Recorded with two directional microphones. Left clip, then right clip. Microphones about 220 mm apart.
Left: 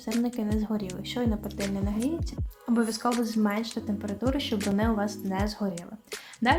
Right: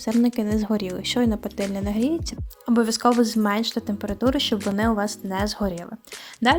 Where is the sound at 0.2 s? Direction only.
40° right (ahead or behind).